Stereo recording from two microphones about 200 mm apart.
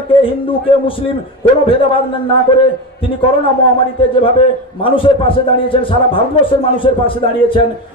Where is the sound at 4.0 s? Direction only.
25° left (ahead or behind).